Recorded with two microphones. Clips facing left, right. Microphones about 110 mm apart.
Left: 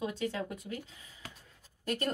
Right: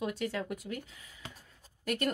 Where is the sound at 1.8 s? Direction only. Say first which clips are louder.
Right 1 dB; 30° left (ahead or behind).